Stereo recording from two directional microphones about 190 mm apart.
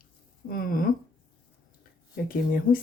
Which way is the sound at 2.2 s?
45° left (ahead or behind).